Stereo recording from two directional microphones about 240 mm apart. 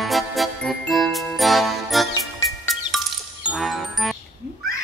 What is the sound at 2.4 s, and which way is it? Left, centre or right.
Music, centre.